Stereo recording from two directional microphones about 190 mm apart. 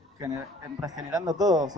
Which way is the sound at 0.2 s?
15° right (ahead or behind).